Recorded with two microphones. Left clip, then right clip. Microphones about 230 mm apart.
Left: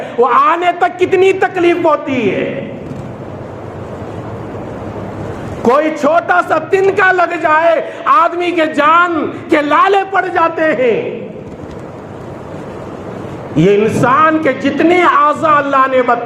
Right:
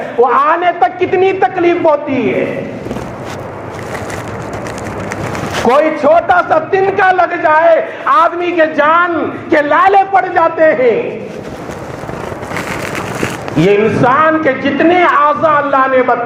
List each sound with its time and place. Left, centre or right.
0.3 s a man's voice: left
5.6 s a man's voice: left
13.6 s a man's voice: left